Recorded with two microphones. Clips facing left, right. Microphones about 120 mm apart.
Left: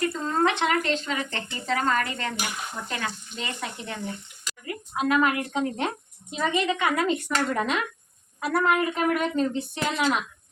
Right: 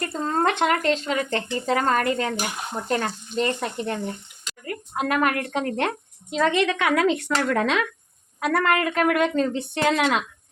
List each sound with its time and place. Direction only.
0.0 s a woman's voice: 45° right (ahead or behind); by 5.9 s 65° right (ahead or behind)
6.3 s a woman's voice: 90° right
8.4 s a woman's voice: 80° right
9.4 s speech: 75° right (ahead or behind)